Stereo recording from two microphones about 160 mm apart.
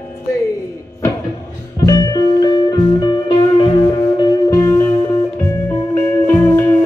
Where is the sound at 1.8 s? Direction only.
25° left (ahead or behind).